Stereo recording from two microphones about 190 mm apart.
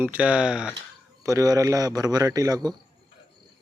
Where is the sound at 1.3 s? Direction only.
15° right (ahead or behind).